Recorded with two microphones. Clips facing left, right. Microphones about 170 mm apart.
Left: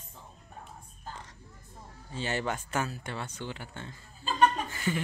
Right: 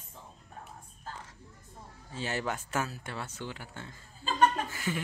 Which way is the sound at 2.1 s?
Centre (ahead or behind).